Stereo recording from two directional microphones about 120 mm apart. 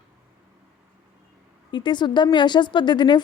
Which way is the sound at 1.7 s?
40° left (ahead or behind).